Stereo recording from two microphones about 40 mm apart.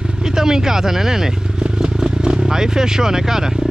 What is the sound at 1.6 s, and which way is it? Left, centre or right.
Vehicle, right.